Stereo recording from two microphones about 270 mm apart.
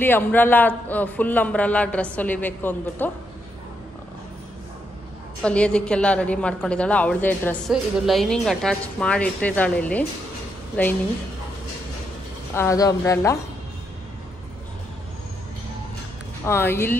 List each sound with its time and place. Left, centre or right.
0.0 s speech: centre
5.4 s a woman's voice: centre
12.5 s speech: centre
16.4 s speech: centre